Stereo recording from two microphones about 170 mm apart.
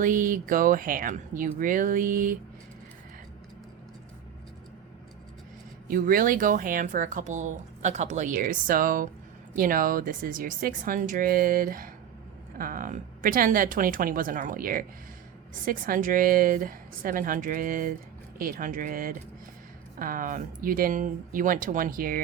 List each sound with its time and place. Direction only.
0.0 s speech: 55° right (ahead or behind)
5.9 s a woman's voice: 55° right (ahead or behind)